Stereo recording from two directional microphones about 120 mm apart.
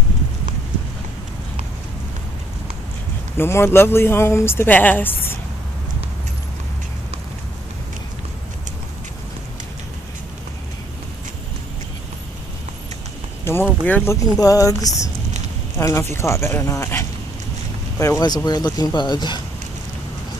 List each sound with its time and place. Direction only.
3.3 s speech: 20° left (ahead or behind)
13.4 s speech: 20° left (ahead or behind)
14.4 s speech: 30° left (ahead or behind)